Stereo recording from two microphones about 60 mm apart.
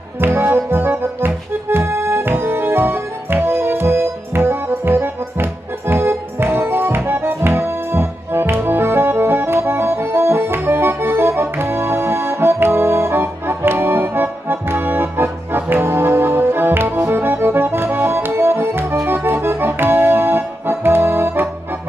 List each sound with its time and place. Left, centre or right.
0.2 s music: right
17.1 s accordion: right